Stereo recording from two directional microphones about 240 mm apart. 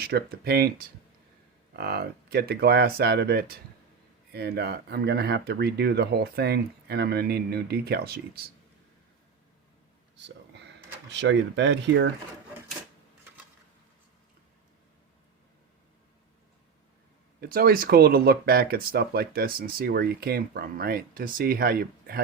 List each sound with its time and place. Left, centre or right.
0.0 s speech: right
1.7 s speech: right
10.2 s a sound: right
11.1 s speech: right
17.4 s speech: right